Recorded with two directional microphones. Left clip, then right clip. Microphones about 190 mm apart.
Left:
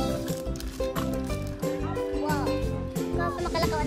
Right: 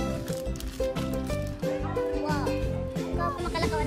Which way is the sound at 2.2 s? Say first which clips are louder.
Left 1 dB; centre (ahead or behind).